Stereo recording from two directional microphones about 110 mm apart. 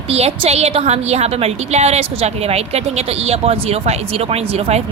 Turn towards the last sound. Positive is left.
turn(degrees=-70)  # may be behind; listen again after turning